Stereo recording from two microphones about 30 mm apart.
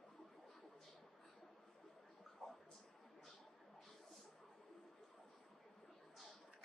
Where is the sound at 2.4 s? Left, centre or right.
Left.